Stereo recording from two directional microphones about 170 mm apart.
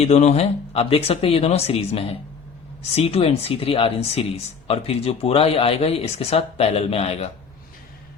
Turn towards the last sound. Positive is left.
turn(degrees=35)  # may be behind; listen again after turning